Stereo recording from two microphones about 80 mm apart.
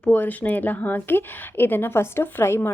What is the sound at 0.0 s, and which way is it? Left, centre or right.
A woman's voice, left.